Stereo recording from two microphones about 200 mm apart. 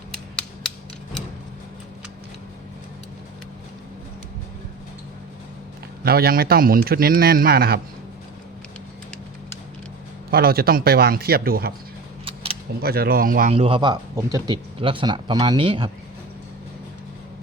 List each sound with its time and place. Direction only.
6.0 s a man's voice: 50° right (ahead or behind)
10.3 s a man's voice: 50° right (ahead or behind)
12.8 s a man's voice: 50° right (ahead or behind)
13.5 s speech: 25° right (ahead or behind)